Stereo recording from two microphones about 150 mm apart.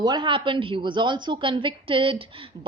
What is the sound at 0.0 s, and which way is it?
A woman's voice, 30° right (ahead or behind).